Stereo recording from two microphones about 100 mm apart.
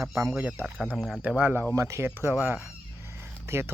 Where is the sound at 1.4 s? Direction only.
15° right (ahead or behind).